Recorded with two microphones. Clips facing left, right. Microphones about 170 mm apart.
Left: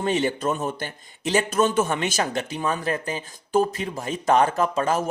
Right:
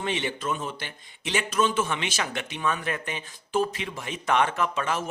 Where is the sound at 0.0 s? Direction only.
40° left (ahead or behind).